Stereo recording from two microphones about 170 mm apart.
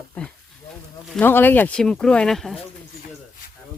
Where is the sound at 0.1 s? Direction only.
5° left (ahead or behind).